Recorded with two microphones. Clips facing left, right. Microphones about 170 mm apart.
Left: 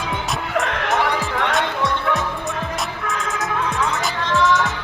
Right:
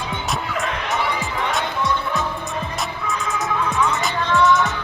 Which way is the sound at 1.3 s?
75° left (ahead or behind).